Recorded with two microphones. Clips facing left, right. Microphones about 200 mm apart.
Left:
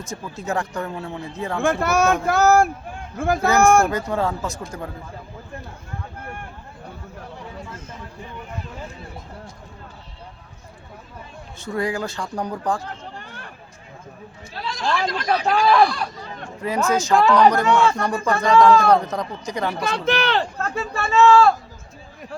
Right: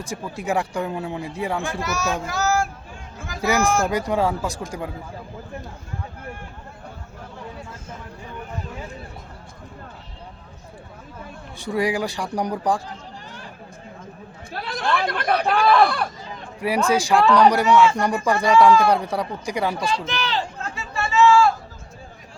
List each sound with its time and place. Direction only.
0.1 s speech: 15° right (ahead or behind)
1.6 s speech: 55° left (ahead or behind)
3.8 s speech: 15° right (ahead or behind)
11.6 s speech: 15° right (ahead or behind)
13.1 s a sound: 60° left (ahead or behind)
14.6 s speech: 55° right (ahead or behind)
16.6 s speech: 10° right (ahead or behind)
19.9 s speech: 60° left (ahead or behind)